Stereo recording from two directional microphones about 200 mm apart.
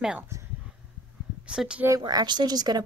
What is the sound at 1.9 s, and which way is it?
Speech, 20° right (ahead or behind).